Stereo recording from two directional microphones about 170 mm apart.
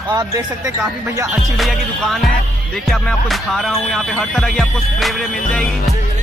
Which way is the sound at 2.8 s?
Centre (ahead or behind).